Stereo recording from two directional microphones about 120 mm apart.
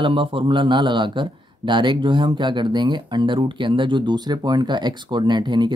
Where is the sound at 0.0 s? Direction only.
45° right (ahead or behind).